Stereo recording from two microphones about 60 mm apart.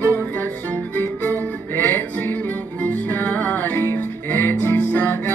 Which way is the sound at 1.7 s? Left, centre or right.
Left.